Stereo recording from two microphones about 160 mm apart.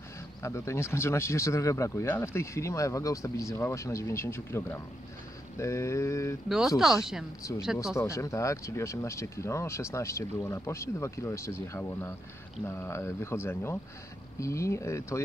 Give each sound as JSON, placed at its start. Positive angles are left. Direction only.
{"t": 0.4, "sound": "speech", "side_deg": 15}
{"t": 6.8, "sound": "speech", "side_deg": -5}
{"t": 7.9, "sound": "speech", "side_deg": 20}